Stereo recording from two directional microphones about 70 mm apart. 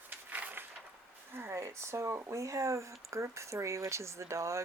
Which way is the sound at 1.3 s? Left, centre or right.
Right.